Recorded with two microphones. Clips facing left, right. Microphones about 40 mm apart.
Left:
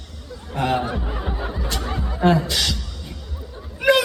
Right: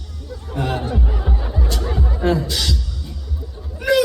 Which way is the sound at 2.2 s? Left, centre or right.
Left.